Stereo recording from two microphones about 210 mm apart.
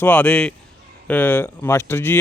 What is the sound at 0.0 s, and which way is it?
A man's voice, 5° left (ahead or behind).